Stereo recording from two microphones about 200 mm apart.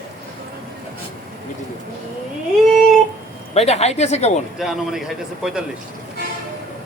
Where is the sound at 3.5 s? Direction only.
30° left (ahead or behind).